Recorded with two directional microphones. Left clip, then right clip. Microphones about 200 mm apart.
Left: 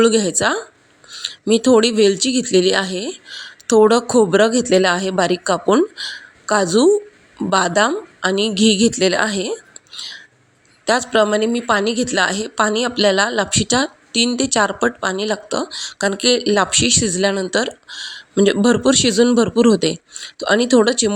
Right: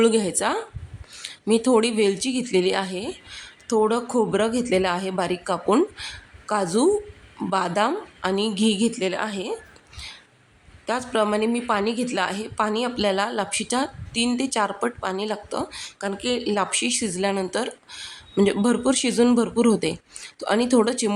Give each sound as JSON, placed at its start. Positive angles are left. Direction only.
{"t": 0.0, "sound": "speech", "side_deg": 20}
{"t": 10.8, "sound": "speech", "side_deg": 25}